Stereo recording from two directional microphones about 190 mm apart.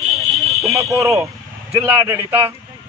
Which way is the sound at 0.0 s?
Centre (ahead or behind).